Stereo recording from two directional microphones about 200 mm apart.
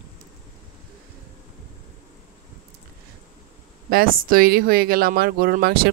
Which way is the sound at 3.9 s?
45° right (ahead or behind).